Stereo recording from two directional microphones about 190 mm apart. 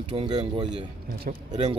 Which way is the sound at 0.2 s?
25° right (ahead or behind).